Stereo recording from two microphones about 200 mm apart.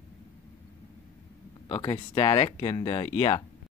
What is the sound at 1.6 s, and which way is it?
Speech, 30° left (ahead or behind).